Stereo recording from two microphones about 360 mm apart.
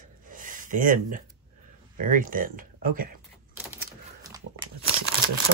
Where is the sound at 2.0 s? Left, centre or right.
Right.